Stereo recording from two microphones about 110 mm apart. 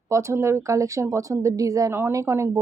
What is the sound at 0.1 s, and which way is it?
Speech, 25° right (ahead or behind).